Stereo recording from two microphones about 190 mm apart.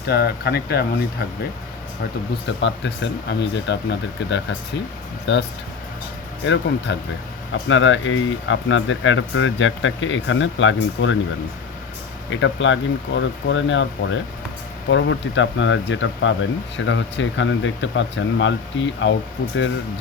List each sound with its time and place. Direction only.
0.0 s speech: 60° left (ahead or behind)
2.5 s speech: 70° left (ahead or behind)
12.3 s speech: 75° left (ahead or behind)